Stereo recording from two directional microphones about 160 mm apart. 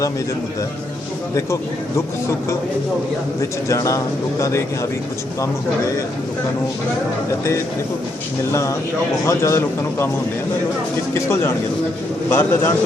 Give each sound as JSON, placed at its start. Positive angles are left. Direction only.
{"t": 3.7, "sound": "speech", "side_deg": 20}
{"t": 9.2, "sound": "a man's voice", "side_deg": 20}
{"t": 11.1, "sound": "a man's voice", "side_deg": 15}